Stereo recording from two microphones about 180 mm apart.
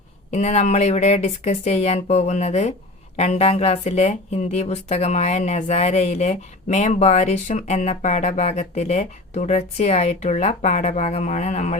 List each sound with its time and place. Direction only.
0.3 s speech: 40° left (ahead or behind)